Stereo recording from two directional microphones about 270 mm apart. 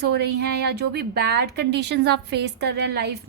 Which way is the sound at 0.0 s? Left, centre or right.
Right.